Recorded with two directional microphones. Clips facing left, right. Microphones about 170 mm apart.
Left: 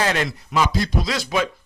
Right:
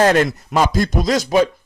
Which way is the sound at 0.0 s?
45° right (ahead or behind).